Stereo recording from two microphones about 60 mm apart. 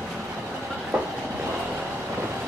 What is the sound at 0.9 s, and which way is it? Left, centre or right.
Train, centre.